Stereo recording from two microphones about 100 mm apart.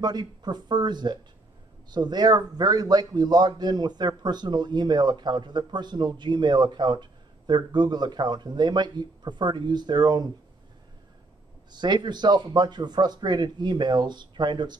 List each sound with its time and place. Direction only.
0.0 s speech: 45° right (ahead or behind)
11.7 s speech: 50° right (ahead or behind)